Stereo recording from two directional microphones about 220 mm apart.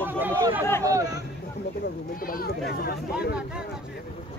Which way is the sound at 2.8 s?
45° left (ahead or behind).